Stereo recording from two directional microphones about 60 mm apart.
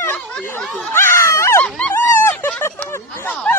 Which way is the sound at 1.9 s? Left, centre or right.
Left.